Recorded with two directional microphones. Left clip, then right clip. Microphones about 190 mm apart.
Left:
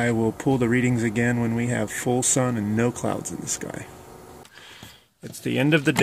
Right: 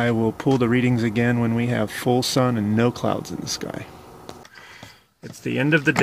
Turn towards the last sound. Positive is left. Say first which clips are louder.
# right 2 dB
turn(degrees=10)  # may be behind; listen again after turning